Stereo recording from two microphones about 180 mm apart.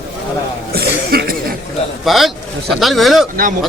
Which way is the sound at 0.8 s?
55° right (ahead or behind).